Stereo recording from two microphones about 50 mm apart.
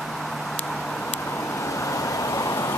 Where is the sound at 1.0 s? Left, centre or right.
Left.